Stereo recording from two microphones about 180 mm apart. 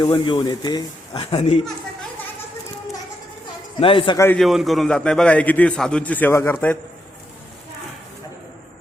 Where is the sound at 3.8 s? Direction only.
30° left (ahead or behind).